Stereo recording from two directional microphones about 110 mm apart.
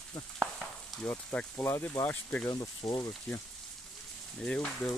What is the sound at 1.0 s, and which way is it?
Speech, 20° left (ahead or behind).